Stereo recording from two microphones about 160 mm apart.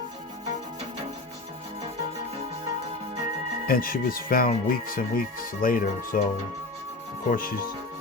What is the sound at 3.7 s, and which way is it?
Speech, 65° left (ahead or behind).